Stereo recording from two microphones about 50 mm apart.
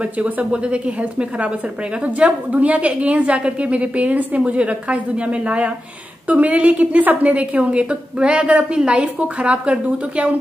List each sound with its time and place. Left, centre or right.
0.0 s a woman's voice: right